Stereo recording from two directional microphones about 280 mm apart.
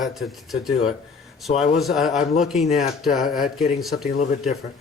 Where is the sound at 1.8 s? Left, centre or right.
Centre.